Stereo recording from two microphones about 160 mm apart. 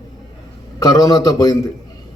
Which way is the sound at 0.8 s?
25° left (ahead or behind).